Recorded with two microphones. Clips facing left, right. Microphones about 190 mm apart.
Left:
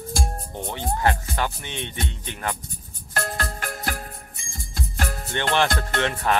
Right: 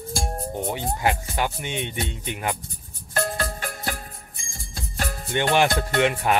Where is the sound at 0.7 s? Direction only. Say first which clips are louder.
Left 2 dB; 10° right (ahead or behind).